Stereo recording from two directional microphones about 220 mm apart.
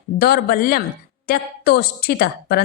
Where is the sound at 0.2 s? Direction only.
45° left (ahead or behind).